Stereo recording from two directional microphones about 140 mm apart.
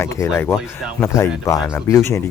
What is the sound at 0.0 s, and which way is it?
Speech, 20° left (ahead or behind).